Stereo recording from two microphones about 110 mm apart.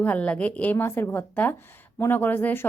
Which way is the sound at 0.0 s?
15° left (ahead or behind).